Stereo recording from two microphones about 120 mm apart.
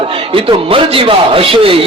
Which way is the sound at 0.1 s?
50° right (ahead or behind).